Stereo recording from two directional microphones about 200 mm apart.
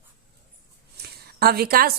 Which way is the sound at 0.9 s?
50° right (ahead or behind).